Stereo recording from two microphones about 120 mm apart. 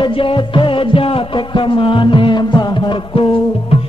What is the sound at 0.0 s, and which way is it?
Music, 45° left (ahead or behind).